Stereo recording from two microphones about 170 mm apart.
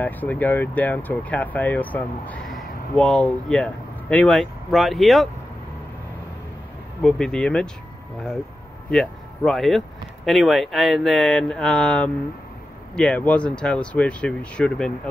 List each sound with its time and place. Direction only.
0.0 s speech: 10° left (ahead or behind)
7.0 s speech: centre (ahead or behind)
8.9 s speech: centre (ahead or behind)